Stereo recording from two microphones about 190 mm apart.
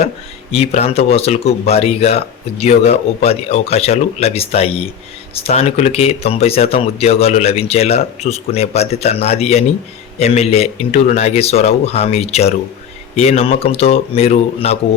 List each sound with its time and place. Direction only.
0.5 s speech: 35° left (ahead or behind)